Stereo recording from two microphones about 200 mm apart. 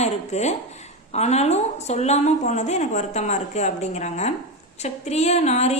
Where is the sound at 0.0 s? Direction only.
35° left (ahead or behind).